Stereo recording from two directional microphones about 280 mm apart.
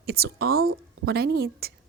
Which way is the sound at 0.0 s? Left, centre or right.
Right.